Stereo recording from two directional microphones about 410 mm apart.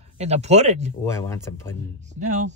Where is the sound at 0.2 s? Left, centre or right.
Centre.